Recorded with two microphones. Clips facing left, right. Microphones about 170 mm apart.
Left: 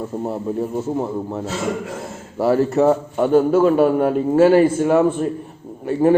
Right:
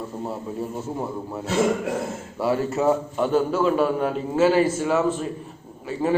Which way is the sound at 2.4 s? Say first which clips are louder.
Left 6 dB; 40° left (ahead or behind).